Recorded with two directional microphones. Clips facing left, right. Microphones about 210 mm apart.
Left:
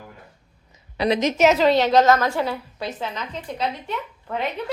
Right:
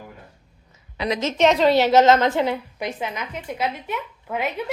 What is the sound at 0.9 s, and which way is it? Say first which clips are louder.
Speech: left 4 dB; 35° left (ahead or behind).